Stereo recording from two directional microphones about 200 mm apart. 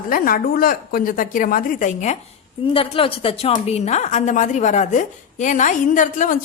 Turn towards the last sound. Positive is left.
turn(degrees=40)  # may be behind; listen again after turning